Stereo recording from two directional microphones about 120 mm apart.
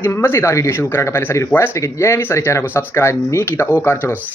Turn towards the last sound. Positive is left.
turn(degrees=20)  # may be behind; listen again after turning